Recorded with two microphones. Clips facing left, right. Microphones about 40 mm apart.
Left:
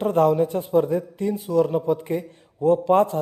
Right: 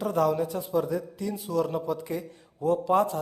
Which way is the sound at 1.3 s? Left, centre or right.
Left.